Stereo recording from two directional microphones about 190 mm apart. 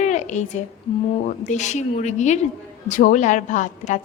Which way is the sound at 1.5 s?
40° left (ahead or behind).